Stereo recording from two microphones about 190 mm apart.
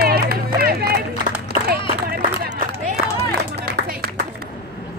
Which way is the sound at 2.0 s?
45° right (ahead or behind).